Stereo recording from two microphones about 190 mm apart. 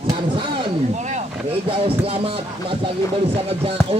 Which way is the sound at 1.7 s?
30° right (ahead or behind).